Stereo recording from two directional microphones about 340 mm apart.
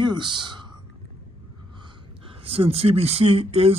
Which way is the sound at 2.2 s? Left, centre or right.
Centre.